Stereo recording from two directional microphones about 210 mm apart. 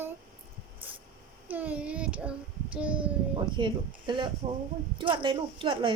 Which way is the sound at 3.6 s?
20° right (ahead or behind).